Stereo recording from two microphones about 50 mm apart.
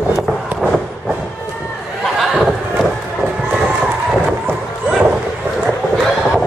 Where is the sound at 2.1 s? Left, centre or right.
Centre.